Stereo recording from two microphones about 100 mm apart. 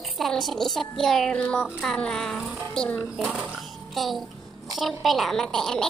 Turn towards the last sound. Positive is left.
turn(degrees=5)  # may be behind; listen again after turning